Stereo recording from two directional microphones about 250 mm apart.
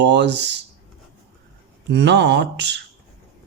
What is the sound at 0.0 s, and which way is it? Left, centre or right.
Speech, right.